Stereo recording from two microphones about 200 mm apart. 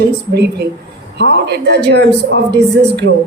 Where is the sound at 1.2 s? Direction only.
55° right (ahead or behind).